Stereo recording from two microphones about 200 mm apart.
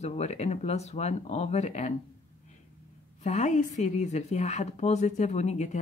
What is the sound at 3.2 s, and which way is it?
A woman's voice, 35° left (ahead or behind).